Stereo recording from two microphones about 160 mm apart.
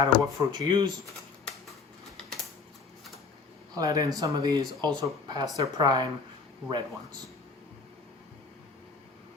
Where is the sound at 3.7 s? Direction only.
20° right (ahead or behind).